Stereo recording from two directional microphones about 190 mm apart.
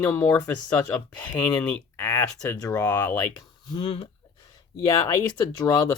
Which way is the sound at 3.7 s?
25° left (ahead or behind).